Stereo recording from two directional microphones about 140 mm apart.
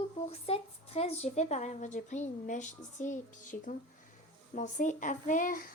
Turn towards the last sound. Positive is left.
turn(degrees=80)